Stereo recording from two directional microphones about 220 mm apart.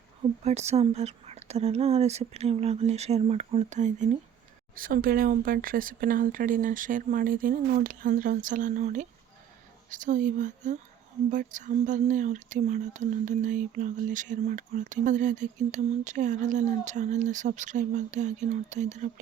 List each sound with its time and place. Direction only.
0.4 s speech: 30° right (ahead or behind)